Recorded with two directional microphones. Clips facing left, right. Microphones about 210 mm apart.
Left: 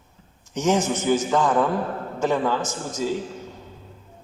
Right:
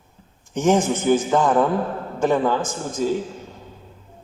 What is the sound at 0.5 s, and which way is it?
A man's voice, 55° right (ahead or behind).